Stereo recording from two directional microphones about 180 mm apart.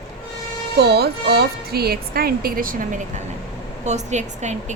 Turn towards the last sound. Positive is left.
turn(degrees=-40)  # may be behind; listen again after turning